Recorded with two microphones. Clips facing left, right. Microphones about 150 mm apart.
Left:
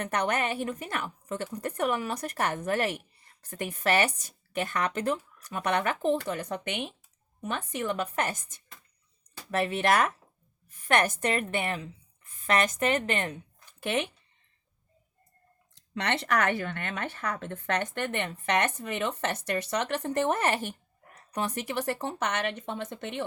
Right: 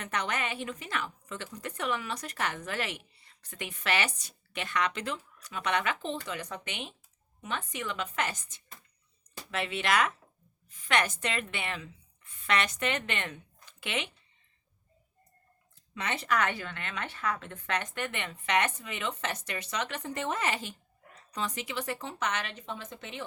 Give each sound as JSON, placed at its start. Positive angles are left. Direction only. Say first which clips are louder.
{"t": 0.0, "sound": "a woman's voice", "louder": "left 5 dB", "side_deg": 50}
{"t": 15.7, "sound": "speech", "louder": "left 5 dB", "side_deg": 70}